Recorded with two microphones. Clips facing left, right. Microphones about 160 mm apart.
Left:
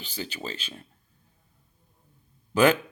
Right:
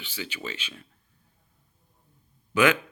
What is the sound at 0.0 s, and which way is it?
Speech, 35° left (ahead or behind).